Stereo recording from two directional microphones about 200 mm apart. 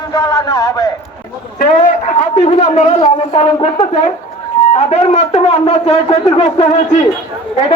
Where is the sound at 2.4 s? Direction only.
30° left (ahead or behind).